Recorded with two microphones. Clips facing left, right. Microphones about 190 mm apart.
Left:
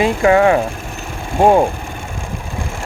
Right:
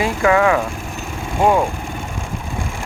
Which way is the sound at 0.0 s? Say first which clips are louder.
Left 3 dB; 30° left (ahead or behind).